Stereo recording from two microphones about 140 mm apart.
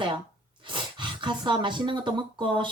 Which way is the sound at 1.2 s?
35° right (ahead or behind).